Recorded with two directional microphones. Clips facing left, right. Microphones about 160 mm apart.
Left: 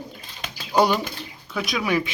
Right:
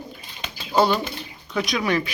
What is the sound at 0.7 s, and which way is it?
Bird, 15° left (ahead or behind).